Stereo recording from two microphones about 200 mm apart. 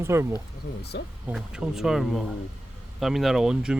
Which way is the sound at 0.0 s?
15° right (ahead or behind).